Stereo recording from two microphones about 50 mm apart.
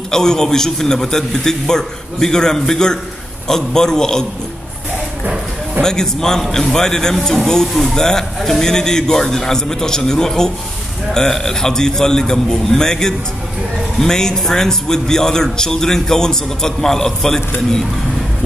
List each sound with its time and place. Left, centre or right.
0.1 s a man's voice: centre
5.8 s a man's voice: centre